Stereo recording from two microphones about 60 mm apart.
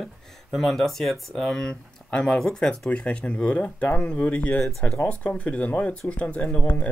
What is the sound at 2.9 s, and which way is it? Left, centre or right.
Speech, left.